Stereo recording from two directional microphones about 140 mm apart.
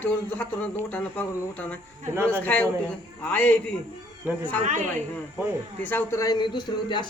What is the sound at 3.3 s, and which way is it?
Speech, 10° left (ahead or behind).